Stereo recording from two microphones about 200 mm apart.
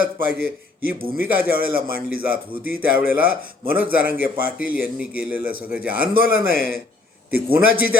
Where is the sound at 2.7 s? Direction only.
50° left (ahead or behind).